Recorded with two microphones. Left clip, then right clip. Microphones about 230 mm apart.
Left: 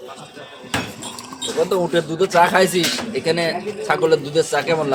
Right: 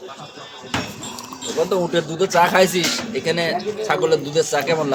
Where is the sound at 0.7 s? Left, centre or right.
Left.